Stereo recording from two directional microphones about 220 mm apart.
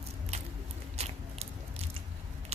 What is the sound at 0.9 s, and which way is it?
Biting, 30° right (ahead or behind).